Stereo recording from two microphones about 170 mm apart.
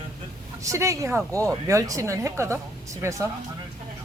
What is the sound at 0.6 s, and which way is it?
Speech, 20° right (ahead or behind).